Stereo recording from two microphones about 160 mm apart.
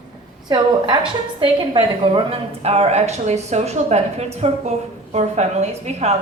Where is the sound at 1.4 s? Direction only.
30° right (ahead or behind).